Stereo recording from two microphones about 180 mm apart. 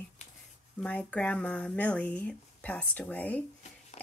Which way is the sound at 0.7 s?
5° left (ahead or behind).